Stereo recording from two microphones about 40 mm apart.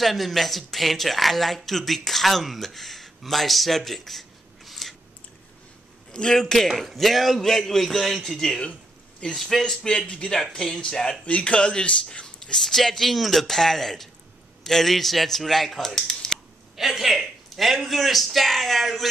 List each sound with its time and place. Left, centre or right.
0.0 s speech: centre
6.3 s speech: centre
9.2 s speech: left
10.3 s speech: centre
11.2 s speech: left
12.5 s speech: centre
16.1 s typing: centre
16.7 s a man's voice: centre
17.5 s a sound: centre
17.8 s speech: centre